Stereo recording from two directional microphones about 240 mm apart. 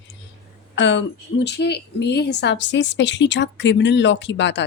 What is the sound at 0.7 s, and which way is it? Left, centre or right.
A woman's voice, left.